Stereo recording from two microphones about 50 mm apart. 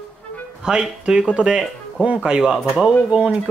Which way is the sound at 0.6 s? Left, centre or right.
Centre.